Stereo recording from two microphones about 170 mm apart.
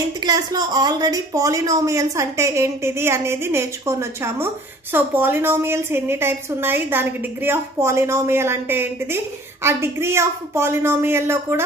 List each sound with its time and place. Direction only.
0.2 s a woman's voice: 25° right (ahead or behind)